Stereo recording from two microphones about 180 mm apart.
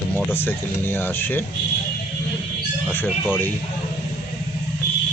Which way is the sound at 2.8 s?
Centre (ahead or behind).